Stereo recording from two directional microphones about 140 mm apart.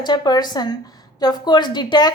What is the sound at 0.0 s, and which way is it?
A woman's voice, 30° left (ahead or behind).